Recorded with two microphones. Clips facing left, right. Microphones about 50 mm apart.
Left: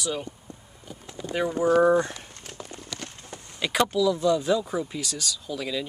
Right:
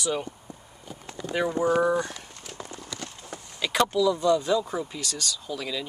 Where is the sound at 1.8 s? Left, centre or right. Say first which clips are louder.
Left 4 dB; left.